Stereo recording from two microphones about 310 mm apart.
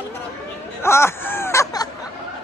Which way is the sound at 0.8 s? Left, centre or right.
Centre.